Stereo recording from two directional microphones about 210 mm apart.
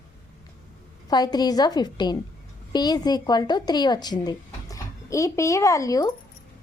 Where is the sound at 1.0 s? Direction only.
20° left (ahead or behind).